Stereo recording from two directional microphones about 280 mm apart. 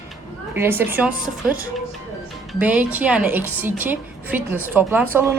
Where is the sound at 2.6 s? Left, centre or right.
Centre.